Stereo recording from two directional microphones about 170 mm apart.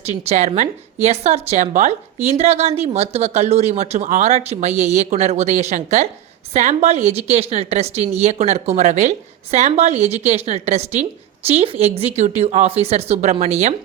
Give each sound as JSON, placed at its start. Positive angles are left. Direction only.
{"t": 0.0, "sound": "a woman's voice", "side_deg": -40}